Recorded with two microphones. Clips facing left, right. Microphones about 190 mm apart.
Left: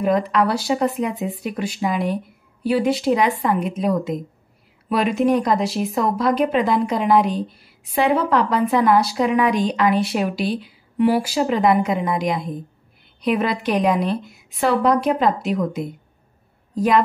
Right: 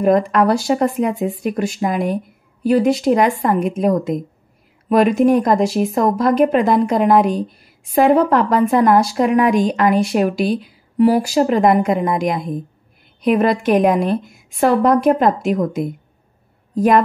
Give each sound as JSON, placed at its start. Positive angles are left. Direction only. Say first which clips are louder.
{"t": 0.0, "sound": "speech", "louder": "right 4 dB", "side_deg": -45}